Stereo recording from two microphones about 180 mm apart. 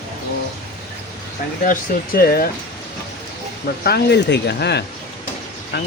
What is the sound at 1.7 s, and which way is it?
Speech, 55° left (ahead or behind).